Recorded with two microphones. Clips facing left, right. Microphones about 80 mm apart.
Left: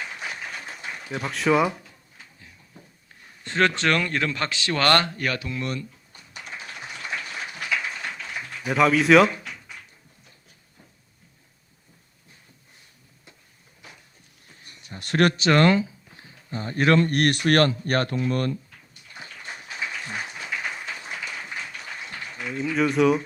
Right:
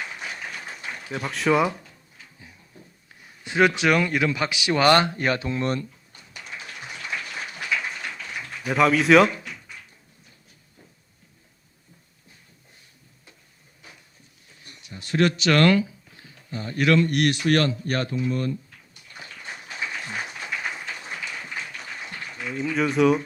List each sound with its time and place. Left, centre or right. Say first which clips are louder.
1.2 s speech: even; centre
3.2 s a sound: right 2 dB; centre
3.8 s speech: right 2 dB; centre; by 5.8 s right
8.6 s speech: even; centre
14.9 s a sound: left 1 dB; left
15.4 s speech: right 1 dB; left
16.5 s speech: left 1 dB; left
22.6 s speech: even; centre